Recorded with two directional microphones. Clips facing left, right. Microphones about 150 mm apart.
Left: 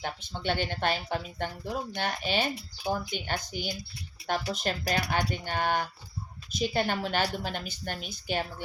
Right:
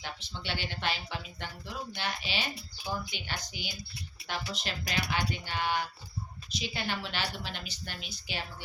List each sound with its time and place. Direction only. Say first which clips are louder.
0.0 s speech: left 7 dB; 50° left (ahead or behind)